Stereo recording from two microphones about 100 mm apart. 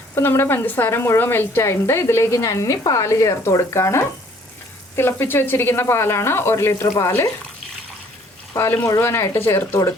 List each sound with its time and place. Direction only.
0.1 s speech: 25° left (ahead or behind)
8.5 s speech: 20° left (ahead or behind)